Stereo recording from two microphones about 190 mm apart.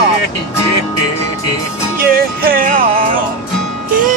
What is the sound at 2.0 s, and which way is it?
Music, 50° right (ahead or behind).